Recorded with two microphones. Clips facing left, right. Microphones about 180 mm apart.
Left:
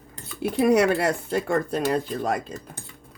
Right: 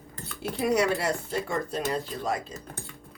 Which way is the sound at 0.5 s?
60° left (ahead or behind).